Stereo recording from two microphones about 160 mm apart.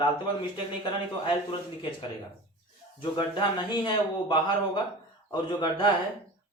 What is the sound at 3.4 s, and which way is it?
A man's voice, 30° left (ahead or behind).